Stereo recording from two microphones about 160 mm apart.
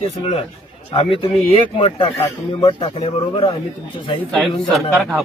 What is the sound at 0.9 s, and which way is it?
Speech, 35° left (ahead or behind).